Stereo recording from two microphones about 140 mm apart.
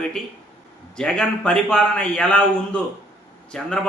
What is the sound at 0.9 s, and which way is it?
A man's voice, 5° left (ahead or behind).